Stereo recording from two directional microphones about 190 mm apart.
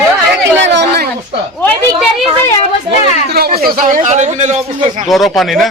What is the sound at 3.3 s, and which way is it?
Speech, 55° right (ahead or behind).